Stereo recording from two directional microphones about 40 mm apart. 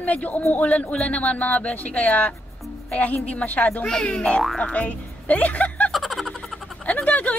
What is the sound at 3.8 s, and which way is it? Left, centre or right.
Speech, left.